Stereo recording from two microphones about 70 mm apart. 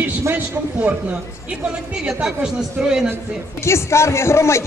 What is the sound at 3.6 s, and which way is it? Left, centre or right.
A man's voice, left.